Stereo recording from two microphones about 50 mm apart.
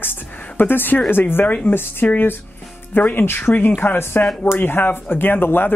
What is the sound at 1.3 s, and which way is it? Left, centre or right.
Speech, left.